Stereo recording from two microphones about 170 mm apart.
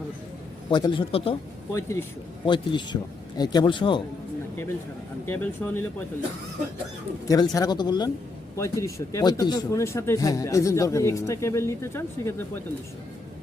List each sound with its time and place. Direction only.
0.7 s speech: 25° left (ahead or behind)
1.7 s speech: 15° left (ahead or behind)
2.5 s speech: 25° left (ahead or behind)
5.2 s speech: 15° left (ahead or behind)
7.3 s speech: 20° left (ahead or behind)